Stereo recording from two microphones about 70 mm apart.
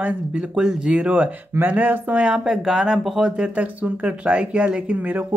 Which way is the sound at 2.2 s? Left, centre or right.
Centre.